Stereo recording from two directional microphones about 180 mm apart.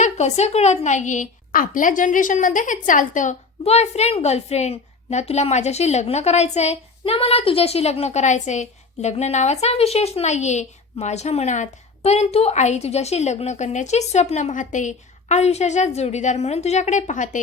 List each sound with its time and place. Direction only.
0.0 s a woman's voice: 40° left (ahead or behind)